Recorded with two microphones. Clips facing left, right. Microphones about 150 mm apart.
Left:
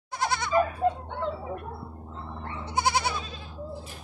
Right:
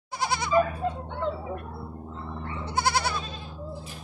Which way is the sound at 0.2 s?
5° right (ahead or behind).